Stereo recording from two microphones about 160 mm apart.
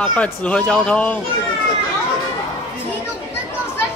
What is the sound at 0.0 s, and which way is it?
Speech, 10° left (ahead or behind).